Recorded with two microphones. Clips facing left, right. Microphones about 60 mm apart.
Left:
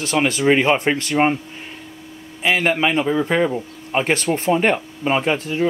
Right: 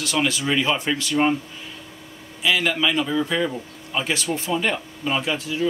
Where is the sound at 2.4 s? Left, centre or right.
Left.